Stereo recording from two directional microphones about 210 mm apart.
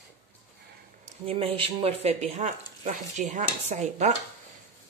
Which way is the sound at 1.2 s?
25° right (ahead or behind).